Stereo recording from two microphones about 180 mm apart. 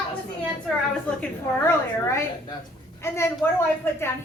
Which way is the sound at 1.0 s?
10° left (ahead or behind).